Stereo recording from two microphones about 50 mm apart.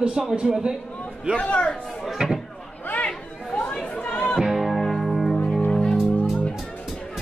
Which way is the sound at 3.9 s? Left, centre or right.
Left.